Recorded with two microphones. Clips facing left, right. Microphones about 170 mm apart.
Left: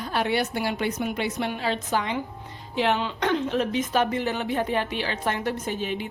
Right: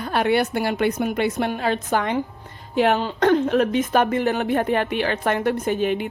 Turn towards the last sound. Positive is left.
turn(degrees=-60)  # may be behind; listen again after turning